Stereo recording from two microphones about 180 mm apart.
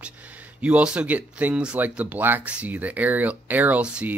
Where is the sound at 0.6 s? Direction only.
5° right (ahead or behind).